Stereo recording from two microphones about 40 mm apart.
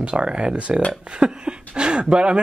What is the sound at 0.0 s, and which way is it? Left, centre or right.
Speech, right.